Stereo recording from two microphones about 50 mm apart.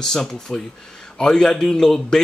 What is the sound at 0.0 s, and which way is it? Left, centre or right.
Speech, centre.